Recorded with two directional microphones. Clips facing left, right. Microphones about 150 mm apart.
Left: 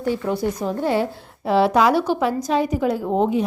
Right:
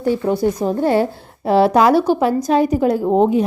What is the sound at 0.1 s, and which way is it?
A woman's voice, 40° right (ahead or behind).